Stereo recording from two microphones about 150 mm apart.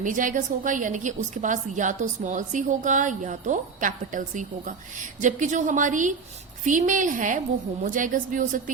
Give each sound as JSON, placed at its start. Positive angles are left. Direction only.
{"t": 0.0, "sound": "a woman's voice", "side_deg": -60}